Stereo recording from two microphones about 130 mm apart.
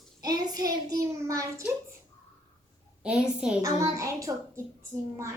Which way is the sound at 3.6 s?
25° right (ahead or behind).